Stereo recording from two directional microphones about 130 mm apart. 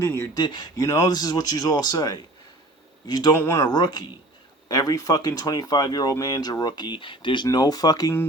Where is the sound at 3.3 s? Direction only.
20° left (ahead or behind).